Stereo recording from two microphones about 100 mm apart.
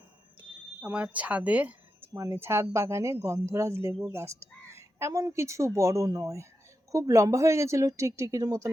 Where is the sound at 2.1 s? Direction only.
30° right (ahead or behind).